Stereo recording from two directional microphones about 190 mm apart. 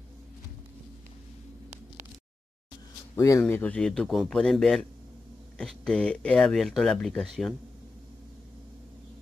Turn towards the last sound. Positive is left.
turn(degrees=0)  # may be behind; listen again after turning